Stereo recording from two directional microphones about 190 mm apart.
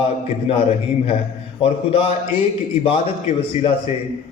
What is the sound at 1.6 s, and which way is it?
Speech, 30° left (ahead or behind).